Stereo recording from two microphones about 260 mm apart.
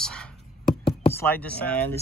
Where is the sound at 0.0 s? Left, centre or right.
Centre.